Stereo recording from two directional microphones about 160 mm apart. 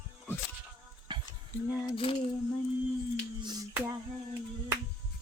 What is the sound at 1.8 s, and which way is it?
Speech, 35° left (ahead or behind).